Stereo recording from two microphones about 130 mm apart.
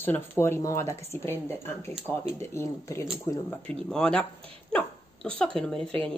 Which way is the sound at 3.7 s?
5° left (ahead or behind).